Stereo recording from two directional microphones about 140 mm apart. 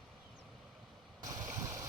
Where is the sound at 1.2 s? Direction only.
25° right (ahead or behind).